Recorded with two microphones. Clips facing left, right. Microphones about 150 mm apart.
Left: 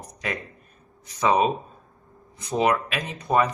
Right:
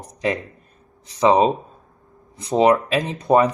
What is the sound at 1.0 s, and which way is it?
Speech, 20° right (ahead or behind).